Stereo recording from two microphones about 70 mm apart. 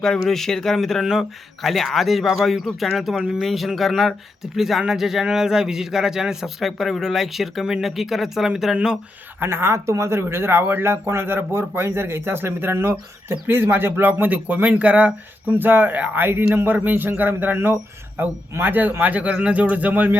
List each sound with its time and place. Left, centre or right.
0.0 s speech: centre
9.4 s speech: right